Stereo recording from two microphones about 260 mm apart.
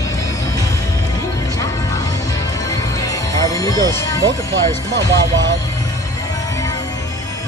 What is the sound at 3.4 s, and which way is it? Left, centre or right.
Music, centre.